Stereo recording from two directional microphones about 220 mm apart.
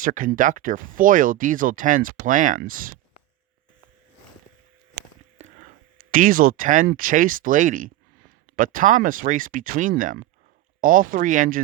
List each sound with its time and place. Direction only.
0.0 s speech: 40° right (ahead or behind)
4.9 s a sound: 35° right (ahead or behind)
8.5 s speech: 35° right (ahead or behind)